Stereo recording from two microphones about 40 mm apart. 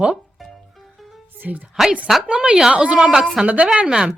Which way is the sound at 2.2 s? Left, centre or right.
Right.